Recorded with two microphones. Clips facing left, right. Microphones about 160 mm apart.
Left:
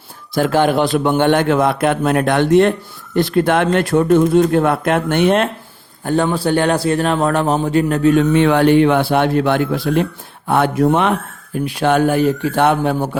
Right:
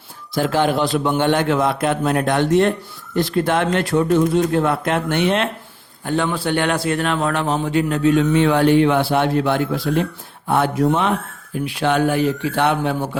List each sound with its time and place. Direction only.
0.3 s a man's voice: 55° left (ahead or behind)
6.1 s a man's voice: 40° left (ahead or behind); by 11.1 s 60° left (ahead or behind)
11.5 s a man's voice: 45° left (ahead or behind)